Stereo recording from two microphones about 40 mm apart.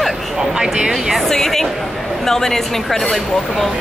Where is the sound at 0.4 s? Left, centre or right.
Centre.